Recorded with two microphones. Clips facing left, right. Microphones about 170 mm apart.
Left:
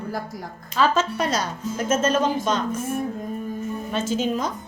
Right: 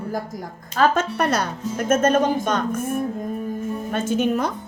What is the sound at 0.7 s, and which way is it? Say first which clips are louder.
A woman's voice: right 2 dB; 55° right (ahead or behind).